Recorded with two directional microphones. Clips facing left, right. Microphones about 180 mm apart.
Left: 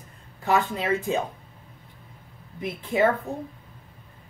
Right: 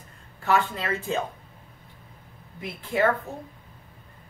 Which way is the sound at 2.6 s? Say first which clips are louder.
Left 2 dB; 20° left (ahead or behind).